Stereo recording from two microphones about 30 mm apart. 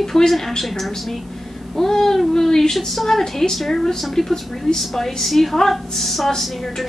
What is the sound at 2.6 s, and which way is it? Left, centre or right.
A woman's voice, centre.